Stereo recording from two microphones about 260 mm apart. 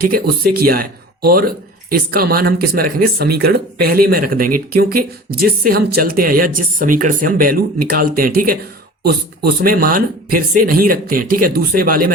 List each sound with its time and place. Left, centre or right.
0.0 s speech: right